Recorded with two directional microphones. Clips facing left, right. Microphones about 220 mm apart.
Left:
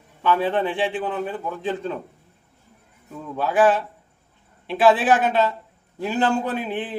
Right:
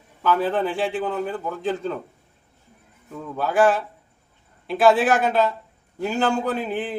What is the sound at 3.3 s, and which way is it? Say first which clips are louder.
A man's voice: left 1 dB; centre (ahead or behind).